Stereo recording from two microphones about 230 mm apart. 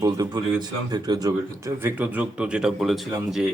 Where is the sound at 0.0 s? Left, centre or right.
Centre.